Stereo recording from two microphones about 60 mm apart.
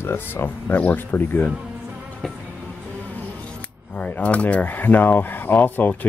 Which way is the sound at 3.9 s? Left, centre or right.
Left.